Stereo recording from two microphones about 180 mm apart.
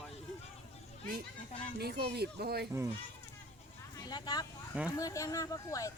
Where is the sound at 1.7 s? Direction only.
60° right (ahead or behind).